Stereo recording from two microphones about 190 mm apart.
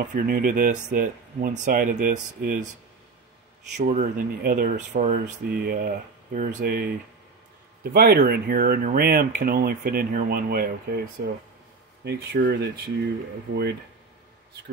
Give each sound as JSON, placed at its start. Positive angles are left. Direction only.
{"t": 0.1, "sound": "speech", "side_deg": -50}
{"t": 3.7, "sound": "speech", "side_deg": -40}
{"t": 12.0, "sound": "speech", "side_deg": -60}